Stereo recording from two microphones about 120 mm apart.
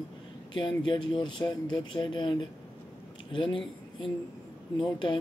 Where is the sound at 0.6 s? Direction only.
40° left (ahead or behind).